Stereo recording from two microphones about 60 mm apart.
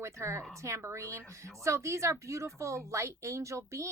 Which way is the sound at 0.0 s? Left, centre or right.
Right.